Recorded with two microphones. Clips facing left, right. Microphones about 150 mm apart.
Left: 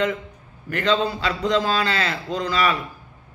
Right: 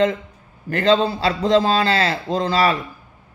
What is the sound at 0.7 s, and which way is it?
A man's voice, 30° right (ahead or behind).